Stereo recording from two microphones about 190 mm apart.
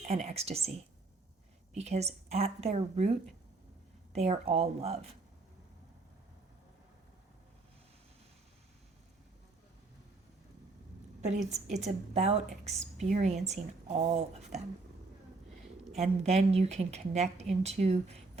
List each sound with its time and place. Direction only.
0.1 s a woman's voice: 35° right (ahead or behind)
1.7 s a woman's voice: 35° right (ahead or behind)
11.5 s a woman's voice: 35° right (ahead or behind)
15.9 s a woman's voice: 35° right (ahead or behind)